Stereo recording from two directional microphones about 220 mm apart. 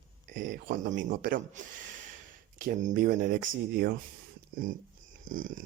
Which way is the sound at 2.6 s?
35° right (ahead or behind).